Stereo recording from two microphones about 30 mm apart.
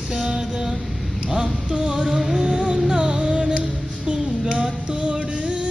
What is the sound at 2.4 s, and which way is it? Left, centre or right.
Music, right.